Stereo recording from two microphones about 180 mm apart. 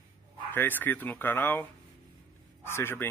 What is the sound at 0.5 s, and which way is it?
Speech, 10° left (ahead or behind).